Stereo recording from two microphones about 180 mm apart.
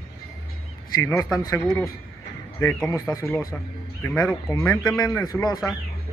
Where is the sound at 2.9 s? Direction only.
15° left (ahead or behind).